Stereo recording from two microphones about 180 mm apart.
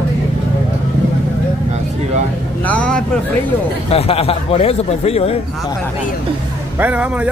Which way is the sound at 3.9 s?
35° left (ahead or behind).